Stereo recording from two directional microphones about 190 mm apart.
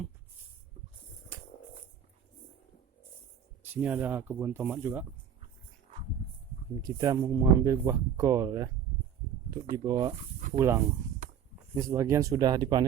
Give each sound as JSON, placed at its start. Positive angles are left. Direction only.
{"t": 3.7, "sound": "speech", "side_deg": -10}
{"t": 6.8, "sound": "speech", "side_deg": -20}
{"t": 9.7, "sound": "speech", "side_deg": -20}